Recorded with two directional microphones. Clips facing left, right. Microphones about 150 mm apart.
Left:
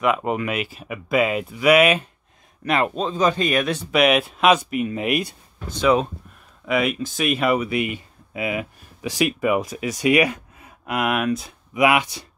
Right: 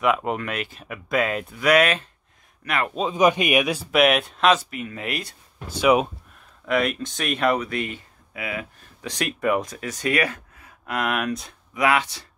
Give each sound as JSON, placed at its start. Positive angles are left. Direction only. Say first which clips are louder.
{"t": 0.0, "sound": "speech", "louder": "left 1 dB", "side_deg": 0}
{"t": 2.6, "sound": "speech", "louder": "left 5 dB", "side_deg": 25}
{"t": 2.9, "sound": "speech", "louder": "right 1 dB", "side_deg": -10}
{"t": 5.7, "sound": "speech", "louder": "even", "side_deg": -10}
{"t": 6.6, "sound": "speech", "louder": "left 1 dB", "side_deg": 5}
{"t": 9.0, "sound": "speech", "louder": "left 3 dB", "side_deg": 5}